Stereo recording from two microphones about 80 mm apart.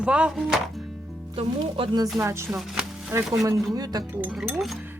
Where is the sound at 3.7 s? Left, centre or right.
Right.